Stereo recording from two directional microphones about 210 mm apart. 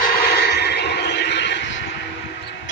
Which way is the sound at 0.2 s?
50° left (ahead or behind).